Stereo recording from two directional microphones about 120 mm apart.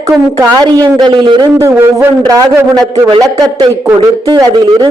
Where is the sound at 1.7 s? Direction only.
15° right (ahead or behind).